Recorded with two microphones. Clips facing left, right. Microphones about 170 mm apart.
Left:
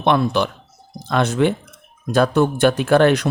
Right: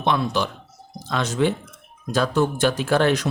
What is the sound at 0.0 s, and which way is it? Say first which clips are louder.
Speech: left 5 dB; 60° left (ahead or behind).